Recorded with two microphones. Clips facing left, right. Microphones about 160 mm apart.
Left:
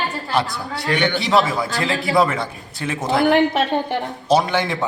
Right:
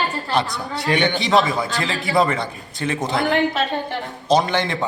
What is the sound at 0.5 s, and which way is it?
Speech, 20° right (ahead or behind).